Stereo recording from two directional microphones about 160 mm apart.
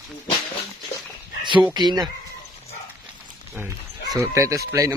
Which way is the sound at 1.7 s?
25° right (ahead or behind).